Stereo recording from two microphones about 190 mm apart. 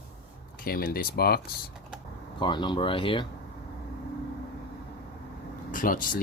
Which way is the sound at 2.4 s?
25° left (ahead or behind).